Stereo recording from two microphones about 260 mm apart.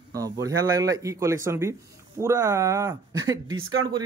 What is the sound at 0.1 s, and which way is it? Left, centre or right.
A man's voice, centre.